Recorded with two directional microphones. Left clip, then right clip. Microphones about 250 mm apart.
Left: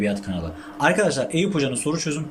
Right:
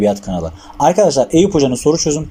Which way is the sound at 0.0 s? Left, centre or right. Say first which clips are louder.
Right 10 dB; right.